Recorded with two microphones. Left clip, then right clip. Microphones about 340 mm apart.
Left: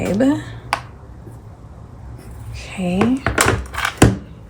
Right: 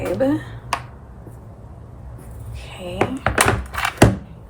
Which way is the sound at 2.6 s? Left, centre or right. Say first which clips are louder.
Left 6 dB; centre.